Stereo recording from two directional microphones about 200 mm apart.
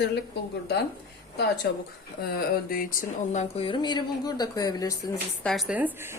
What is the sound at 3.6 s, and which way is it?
Speech, 25° left (ahead or behind).